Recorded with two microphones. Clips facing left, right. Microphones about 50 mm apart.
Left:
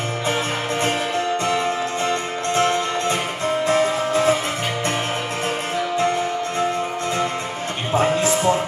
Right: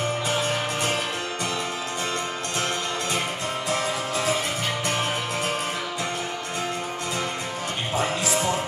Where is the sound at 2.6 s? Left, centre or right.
Left.